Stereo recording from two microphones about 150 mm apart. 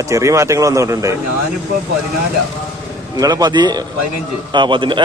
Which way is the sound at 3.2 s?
25° right (ahead or behind).